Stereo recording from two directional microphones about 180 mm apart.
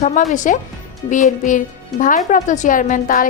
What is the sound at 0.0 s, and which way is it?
Speech, 40° left (ahead or behind).